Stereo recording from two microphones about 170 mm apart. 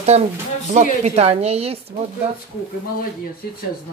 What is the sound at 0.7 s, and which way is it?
Speech, 40° right (ahead or behind).